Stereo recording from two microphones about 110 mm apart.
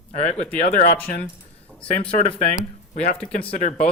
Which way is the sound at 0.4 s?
15° left (ahead or behind).